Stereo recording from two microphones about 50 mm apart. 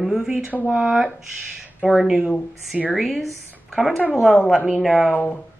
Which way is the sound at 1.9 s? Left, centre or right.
Centre.